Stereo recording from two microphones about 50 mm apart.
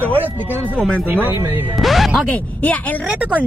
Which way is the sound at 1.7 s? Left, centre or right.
Centre.